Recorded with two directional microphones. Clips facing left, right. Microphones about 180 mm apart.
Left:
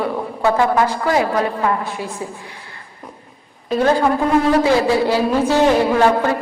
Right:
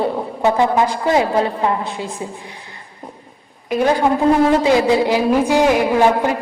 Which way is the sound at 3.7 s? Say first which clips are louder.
Even; 15° right (ahead or behind).